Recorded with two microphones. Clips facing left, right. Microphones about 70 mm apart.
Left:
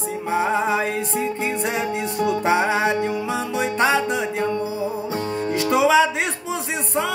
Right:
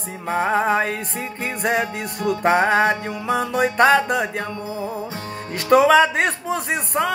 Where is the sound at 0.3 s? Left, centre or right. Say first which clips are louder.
Right 2 dB; right.